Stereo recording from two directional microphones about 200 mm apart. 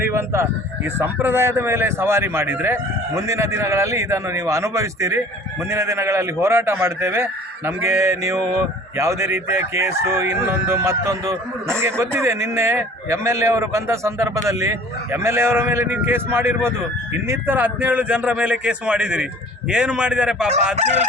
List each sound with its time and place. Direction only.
0.0 s a man's voice: 15° right (ahead or behind)
20.7 s speech: 35° right (ahead or behind)